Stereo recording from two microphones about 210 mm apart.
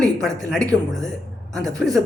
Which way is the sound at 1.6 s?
5° left (ahead or behind).